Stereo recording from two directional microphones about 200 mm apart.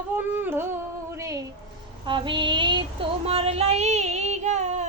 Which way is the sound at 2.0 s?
25° right (ahead or behind).